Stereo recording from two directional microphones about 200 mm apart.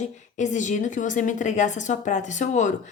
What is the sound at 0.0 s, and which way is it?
A woman's voice, 40° left (ahead or behind).